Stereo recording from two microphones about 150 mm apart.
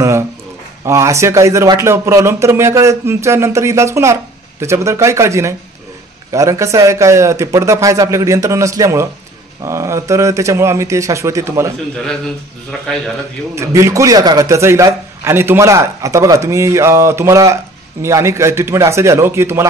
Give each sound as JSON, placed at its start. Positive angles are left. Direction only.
{"t": 0.8, "sound": "speech", "side_deg": -20}
{"t": 13.6, "sound": "speech", "side_deg": -20}